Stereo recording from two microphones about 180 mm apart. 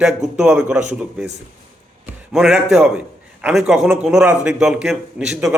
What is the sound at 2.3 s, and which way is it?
A man's voice, centre (ahead or behind).